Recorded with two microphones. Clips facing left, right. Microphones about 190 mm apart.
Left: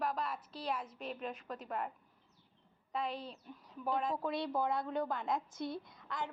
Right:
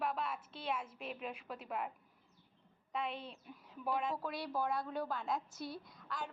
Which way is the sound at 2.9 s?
5° right (ahead or behind).